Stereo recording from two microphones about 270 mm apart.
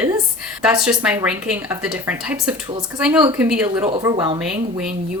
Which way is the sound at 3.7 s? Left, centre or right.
Centre.